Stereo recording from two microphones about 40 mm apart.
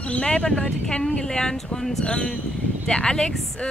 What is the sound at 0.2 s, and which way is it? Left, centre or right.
A woman's voice, left.